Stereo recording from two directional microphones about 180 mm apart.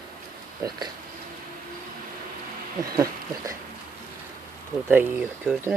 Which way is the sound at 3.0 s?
20° right (ahead or behind).